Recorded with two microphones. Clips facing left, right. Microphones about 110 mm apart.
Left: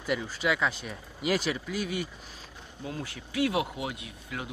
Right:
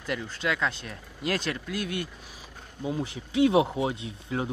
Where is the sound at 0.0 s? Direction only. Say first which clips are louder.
Left 1 dB; 5° left (ahead or behind).